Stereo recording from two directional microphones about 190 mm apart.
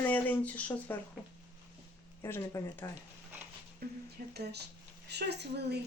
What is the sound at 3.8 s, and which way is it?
A woman's voice, 55° right (ahead or behind).